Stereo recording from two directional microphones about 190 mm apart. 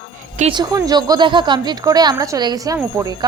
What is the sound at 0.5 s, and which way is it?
A woman's voice, 20° right (ahead or behind).